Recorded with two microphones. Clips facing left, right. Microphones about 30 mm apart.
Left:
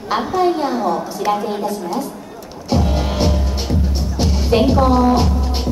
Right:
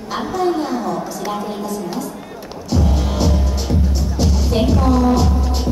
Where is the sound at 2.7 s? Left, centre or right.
Left.